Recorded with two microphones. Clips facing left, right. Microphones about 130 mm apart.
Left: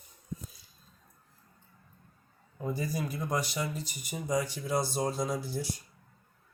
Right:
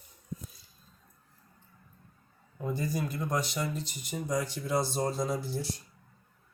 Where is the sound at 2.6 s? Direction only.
Centre (ahead or behind).